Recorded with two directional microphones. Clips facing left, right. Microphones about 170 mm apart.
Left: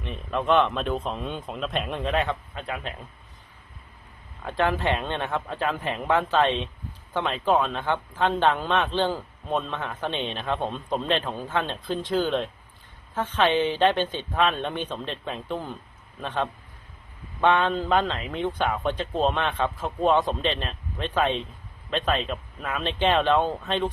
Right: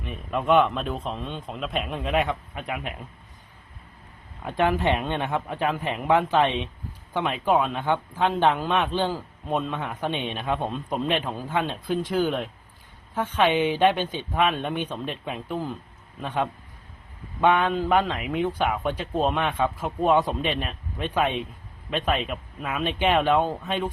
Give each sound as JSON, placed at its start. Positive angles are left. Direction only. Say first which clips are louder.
{"t": 0.0, "sound": "speech", "louder": "even", "side_deg": -5}
{"t": 2.1, "sound": "speech", "louder": "right 5 dB", "side_deg": -15}
{"t": 4.4, "sound": "speech", "louder": "right 2 dB", "side_deg": -15}